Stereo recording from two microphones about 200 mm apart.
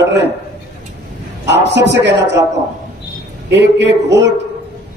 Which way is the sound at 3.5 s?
60° right (ahead or behind).